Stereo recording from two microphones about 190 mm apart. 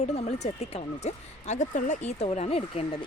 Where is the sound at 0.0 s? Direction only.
35° left (ahead or behind).